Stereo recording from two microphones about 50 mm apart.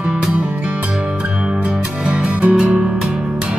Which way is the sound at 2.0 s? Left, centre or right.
Right.